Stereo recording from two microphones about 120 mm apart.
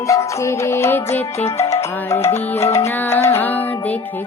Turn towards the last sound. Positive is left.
turn(degrees=15)  # may be behind; listen again after turning